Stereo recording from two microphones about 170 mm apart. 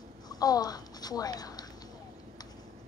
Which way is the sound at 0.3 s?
20° left (ahead or behind).